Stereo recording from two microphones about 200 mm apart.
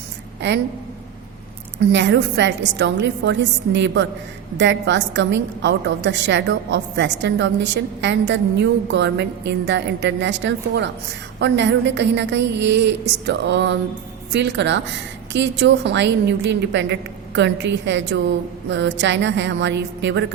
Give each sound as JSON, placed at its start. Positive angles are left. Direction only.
{"t": 1.9, "sound": "a woman's voice", "side_deg": -60}